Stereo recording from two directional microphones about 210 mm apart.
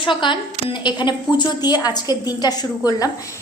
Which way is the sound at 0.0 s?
25° left (ahead or behind).